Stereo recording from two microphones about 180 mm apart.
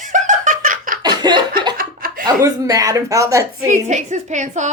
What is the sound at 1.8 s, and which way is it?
Chuckle, 50° right (ahead or behind).